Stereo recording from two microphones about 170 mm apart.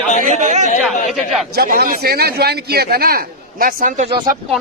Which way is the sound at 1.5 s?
60° right (ahead or behind).